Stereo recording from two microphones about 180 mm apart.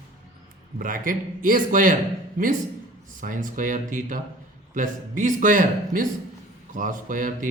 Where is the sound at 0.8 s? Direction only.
50° right (ahead or behind).